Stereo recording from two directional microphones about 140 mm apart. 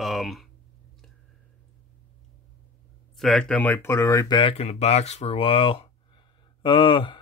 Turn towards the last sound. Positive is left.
turn(degrees=40)  # may be behind; listen again after turning